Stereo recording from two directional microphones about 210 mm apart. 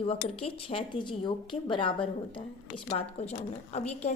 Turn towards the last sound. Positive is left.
turn(degrees=30)  # may be behind; listen again after turning